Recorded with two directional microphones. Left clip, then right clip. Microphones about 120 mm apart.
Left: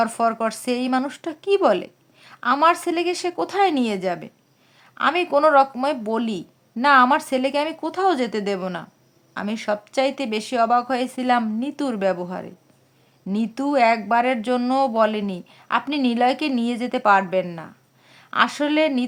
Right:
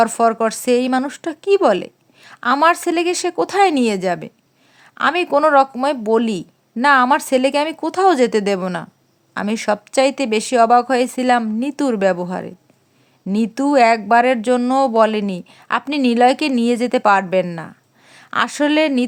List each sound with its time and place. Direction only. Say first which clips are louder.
0.0 s a woman's voice: right 6 dB; 35° right (ahead or behind)